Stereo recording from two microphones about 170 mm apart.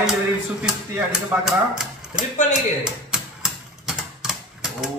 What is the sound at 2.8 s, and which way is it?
Typewriter, 5° right (ahead or behind).